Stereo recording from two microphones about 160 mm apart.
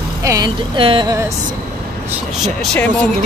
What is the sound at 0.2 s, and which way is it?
Speech, 20° right (ahead or behind).